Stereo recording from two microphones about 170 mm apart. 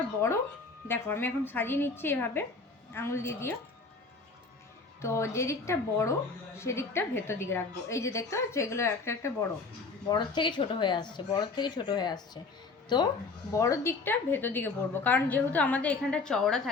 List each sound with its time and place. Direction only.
0.9 s a woman's voice: 15° left (ahead or behind)
5.0 s a woman's voice: 15° left (ahead or behind)
10.1 s speech: 25° left (ahead or behind)
13.5 s a woman's voice: 20° left (ahead or behind)